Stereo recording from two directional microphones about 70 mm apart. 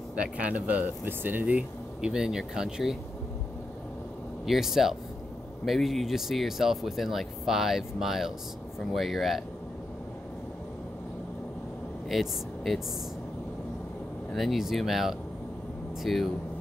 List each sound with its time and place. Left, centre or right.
0.2 s speech: centre
2.0 s speech: centre
4.5 s speech: centre
12.1 s speech: centre
14.3 s speech: centre